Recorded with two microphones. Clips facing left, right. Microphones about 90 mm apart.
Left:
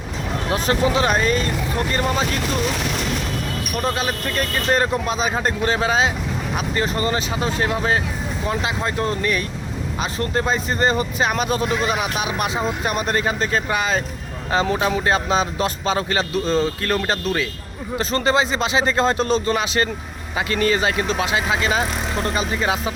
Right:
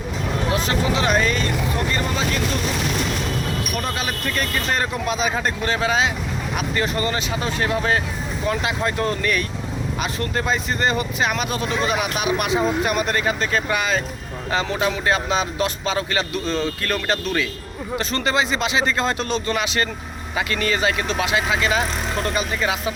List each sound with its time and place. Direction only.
0.5 s speech: 35° left (ahead or behind)
3.8 s speech: 30° left (ahead or behind)